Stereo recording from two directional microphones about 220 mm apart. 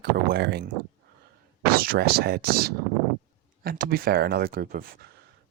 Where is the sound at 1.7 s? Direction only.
40° right (ahead or behind).